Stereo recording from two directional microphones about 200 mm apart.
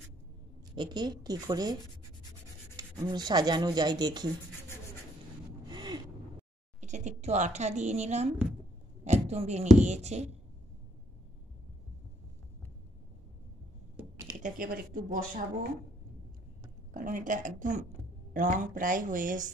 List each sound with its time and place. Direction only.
0.7 s speech: 20° right (ahead or behind)
5.7 s gasp: 20° right (ahead or behind)
6.8 s a woman's voice: 35° right (ahead or behind)
9.0 s a sound: 35° right (ahead or behind)
9.8 s a woman's voice: 35° right (ahead or behind)
14.0 s a sound: 5° right (ahead or behind)
14.4 s speech: 45° right (ahead or behind)
16.9 s a woman's voice: 40° right (ahead or behind)